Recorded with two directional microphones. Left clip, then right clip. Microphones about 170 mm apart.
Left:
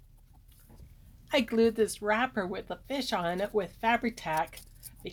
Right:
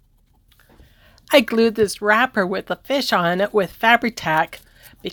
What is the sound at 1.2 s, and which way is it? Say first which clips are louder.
Speech: right 11 dB; 35° right (ahead or behind).